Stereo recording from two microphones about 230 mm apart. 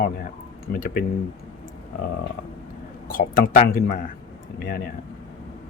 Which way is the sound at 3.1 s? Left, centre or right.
Left.